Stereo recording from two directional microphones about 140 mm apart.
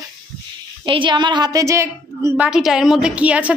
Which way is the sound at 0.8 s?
35° right (ahead or behind).